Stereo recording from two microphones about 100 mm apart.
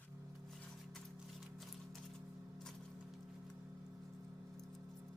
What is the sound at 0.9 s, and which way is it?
Music, centre (ahead or behind).